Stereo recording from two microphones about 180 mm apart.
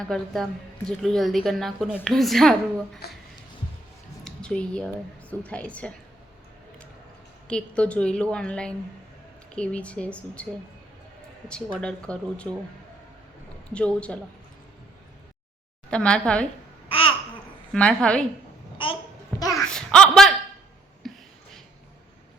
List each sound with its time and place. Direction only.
0.1 s a woman's voice: 5° left (ahead or behind)
4.2 s a sound: 5° left (ahead or behind)
5.3 s speech: 5° left (ahead or behind)
7.4 s a woman's voice: 5° left (ahead or behind)
11.4 s a woman's voice: 5° left (ahead or behind)
13.7 s speech: 5° left (ahead or behind)
15.9 s a woman's voice: 5° left (ahead or behind)
16.9 s babbling: 30° left (ahead or behind)
17.7 s a woman's voice: 5° left (ahead or behind)
18.8 s a child's voice: 30° left (ahead or behind)
19.4 s a sound: 20° left (ahead or behind)
19.7 s a sound: 5° left (ahead or behind)